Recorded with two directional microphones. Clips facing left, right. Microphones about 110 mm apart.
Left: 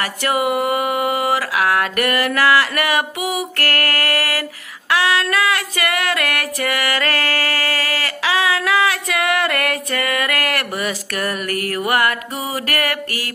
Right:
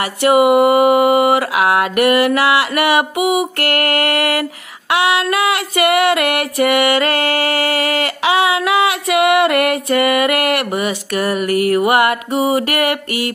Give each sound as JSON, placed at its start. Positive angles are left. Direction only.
{"t": 0.3, "sound": "mantra", "side_deg": -20}
{"t": 4.9, "sound": "female singing", "side_deg": -25}
{"t": 11.7, "sound": "music", "side_deg": -15}
{"t": 12.4, "sound": "mantra", "side_deg": -30}